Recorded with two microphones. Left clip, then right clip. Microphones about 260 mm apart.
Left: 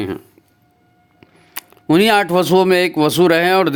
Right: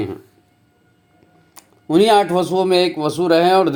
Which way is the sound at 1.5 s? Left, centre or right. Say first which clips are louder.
Left 1 dB; left.